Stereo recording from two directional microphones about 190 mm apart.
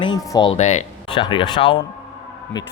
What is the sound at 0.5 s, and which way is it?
Speech, 35° left (ahead or behind).